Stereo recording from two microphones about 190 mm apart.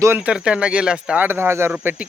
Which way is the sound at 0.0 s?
10° right (ahead or behind).